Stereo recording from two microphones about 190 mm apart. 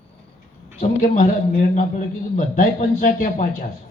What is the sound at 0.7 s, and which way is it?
A man's voice, 45° left (ahead or behind).